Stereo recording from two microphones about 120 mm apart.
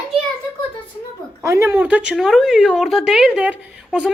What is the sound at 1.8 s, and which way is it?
Speech, 10° right (ahead or behind).